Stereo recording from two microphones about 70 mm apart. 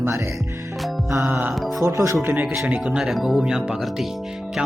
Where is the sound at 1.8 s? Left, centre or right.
Right.